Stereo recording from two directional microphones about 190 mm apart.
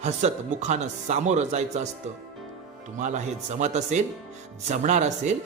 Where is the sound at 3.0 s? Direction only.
40° right (ahead or behind).